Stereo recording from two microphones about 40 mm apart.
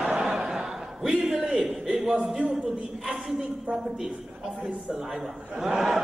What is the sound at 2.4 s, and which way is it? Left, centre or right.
Speech, centre.